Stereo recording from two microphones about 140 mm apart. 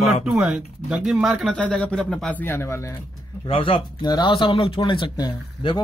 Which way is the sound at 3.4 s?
40° left (ahead or behind).